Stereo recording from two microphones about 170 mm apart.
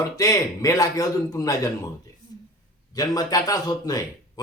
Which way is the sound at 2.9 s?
20° left (ahead or behind).